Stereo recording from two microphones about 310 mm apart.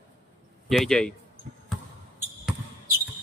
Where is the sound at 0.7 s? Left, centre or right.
Centre.